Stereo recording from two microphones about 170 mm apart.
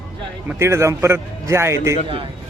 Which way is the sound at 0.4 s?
15° right (ahead or behind).